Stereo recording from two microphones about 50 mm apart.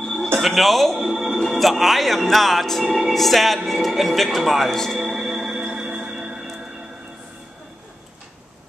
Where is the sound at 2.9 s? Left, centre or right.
Centre.